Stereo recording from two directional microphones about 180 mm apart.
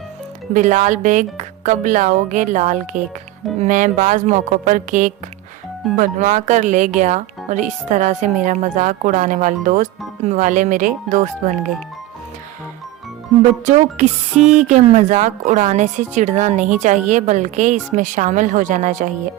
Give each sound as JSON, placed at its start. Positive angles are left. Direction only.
{"t": 0.5, "sound": "speech", "side_deg": -40}
{"t": 13.4, "sound": "music", "side_deg": -40}
{"t": 14.5, "sound": "speech", "side_deg": -40}